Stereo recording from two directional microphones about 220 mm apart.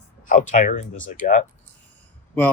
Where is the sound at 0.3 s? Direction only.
35° left (ahead or behind).